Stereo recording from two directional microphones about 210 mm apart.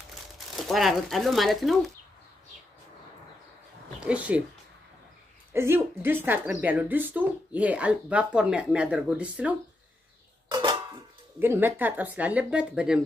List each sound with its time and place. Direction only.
0.6 s speech: centre (ahead or behind)
4.0 s speech: 5° right (ahead or behind)
5.5 s speech: 10° right (ahead or behind)
10.5 s music: 20° right (ahead or behind)
11.3 s speech: 10° right (ahead or behind)